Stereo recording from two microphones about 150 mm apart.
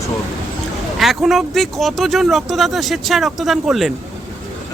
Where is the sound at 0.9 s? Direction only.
Centre (ahead or behind).